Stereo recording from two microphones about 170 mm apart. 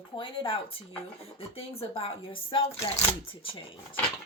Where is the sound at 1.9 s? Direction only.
30° left (ahead or behind).